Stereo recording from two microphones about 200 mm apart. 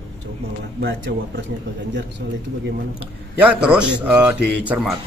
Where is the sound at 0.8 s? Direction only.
55° right (ahead or behind).